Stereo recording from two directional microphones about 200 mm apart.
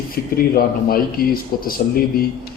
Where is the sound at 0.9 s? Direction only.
45° left (ahead or behind).